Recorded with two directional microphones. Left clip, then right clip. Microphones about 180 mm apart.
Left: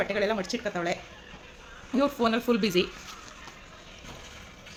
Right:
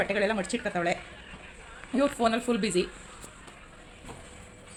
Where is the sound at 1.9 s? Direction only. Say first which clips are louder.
Even; 10° left (ahead or behind).